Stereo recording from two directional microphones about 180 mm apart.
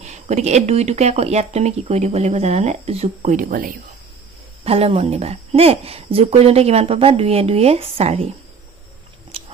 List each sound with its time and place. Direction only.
0.0 s speech: 40° right (ahead or behind)
4.6 s speech: 35° right (ahead or behind)